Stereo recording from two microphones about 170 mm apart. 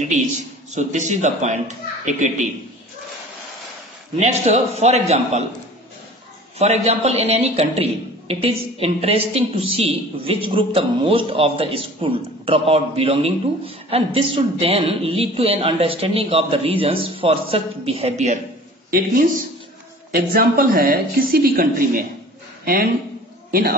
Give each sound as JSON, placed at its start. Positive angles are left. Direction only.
{"t": 0.7, "sound": "a man's voice", "side_deg": -45}
{"t": 4.2, "sound": "a man's voice", "side_deg": -40}
{"t": 6.6, "sound": "a man's voice", "side_deg": -40}
{"t": 18.9, "sound": "a woman's voice", "side_deg": -55}